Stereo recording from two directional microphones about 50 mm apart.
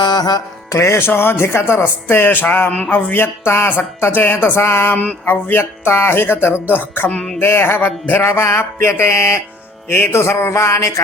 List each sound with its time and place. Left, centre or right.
0.7 s music: left
1.0 s speech: left
2.9 s a sound: left
3.4 s music: left
4.0 s speech: left
5.0 s speech: left
7.8 s music: left